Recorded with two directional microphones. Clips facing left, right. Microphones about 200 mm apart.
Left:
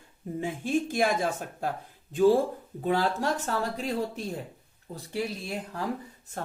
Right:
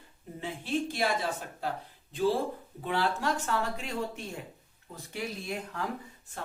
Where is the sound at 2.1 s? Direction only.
50° left (ahead or behind).